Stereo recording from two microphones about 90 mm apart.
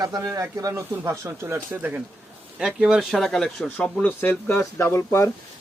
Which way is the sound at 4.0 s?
20° left (ahead or behind).